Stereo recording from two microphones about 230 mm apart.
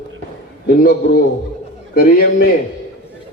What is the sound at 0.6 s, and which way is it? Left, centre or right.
Speech, left.